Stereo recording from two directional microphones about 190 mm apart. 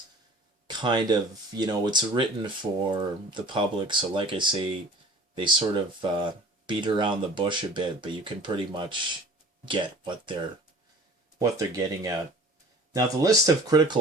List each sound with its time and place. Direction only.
0.7 s speech: 25° right (ahead or behind)
11.3 s speech: 15° right (ahead or behind)
12.9 s speech: 15° right (ahead or behind)